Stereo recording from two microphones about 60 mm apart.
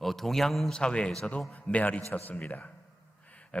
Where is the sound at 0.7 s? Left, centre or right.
Centre.